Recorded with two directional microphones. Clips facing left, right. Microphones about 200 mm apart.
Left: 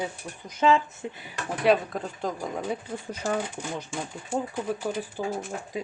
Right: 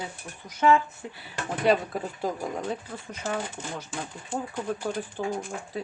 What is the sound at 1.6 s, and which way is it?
Speech, centre (ahead or behind).